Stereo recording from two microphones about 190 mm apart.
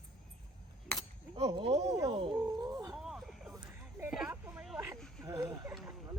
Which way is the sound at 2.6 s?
20° right (ahead or behind).